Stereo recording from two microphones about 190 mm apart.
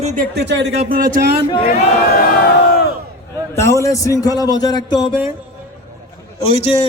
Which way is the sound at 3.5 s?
15° left (ahead or behind).